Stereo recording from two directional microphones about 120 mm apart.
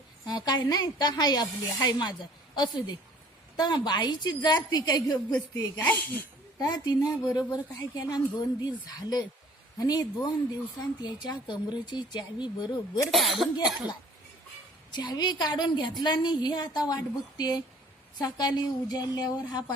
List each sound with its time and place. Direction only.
0.3 s a woman's voice: 35° left (ahead or behind)
5.8 s speech: 15° left (ahead or behind)
6.6 s a woman's voice: 35° left (ahead or behind)
13.1 s a woman's voice: centre (ahead or behind)
14.8 s a woman's voice: 40° left (ahead or behind)